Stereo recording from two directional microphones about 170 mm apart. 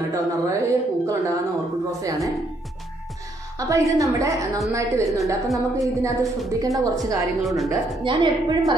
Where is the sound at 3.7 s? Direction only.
20° right (ahead or behind).